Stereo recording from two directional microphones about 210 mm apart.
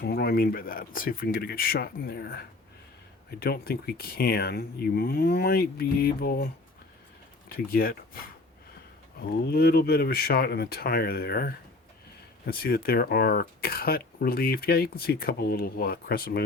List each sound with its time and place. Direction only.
0.0 s speech: 45° left (ahead or behind)
7.5 s speech: 45° left (ahead or behind)
9.2 s speech: 50° left (ahead or behind)